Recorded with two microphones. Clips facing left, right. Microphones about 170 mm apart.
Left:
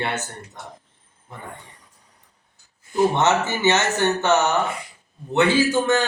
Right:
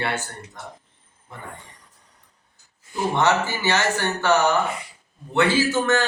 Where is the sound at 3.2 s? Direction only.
20° left (ahead or behind).